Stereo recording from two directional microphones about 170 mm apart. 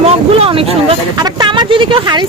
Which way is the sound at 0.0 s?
35° right (ahead or behind).